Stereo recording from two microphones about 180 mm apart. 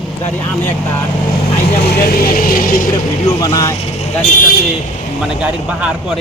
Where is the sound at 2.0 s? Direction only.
55° left (ahead or behind).